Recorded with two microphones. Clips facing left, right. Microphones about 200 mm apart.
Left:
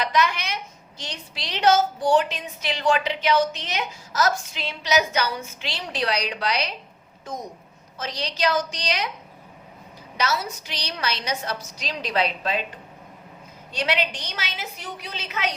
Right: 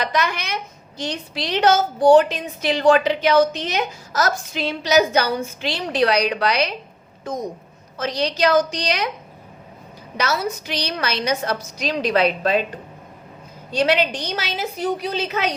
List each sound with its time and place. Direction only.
0.0 s a woman's voice: 50° right (ahead or behind)
5.4 s a woman's voice: 55° right (ahead or behind)
7.9 s a woman's voice: 60° right (ahead or behind)
10.2 s a woman's voice: 60° right (ahead or behind)
13.7 s a woman's voice: 40° right (ahead or behind)